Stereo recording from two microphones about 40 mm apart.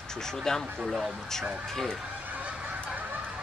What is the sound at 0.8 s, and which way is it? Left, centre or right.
Speech, centre.